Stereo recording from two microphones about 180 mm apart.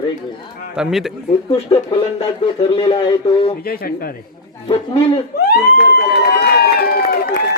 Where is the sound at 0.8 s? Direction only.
5° right (ahead or behind).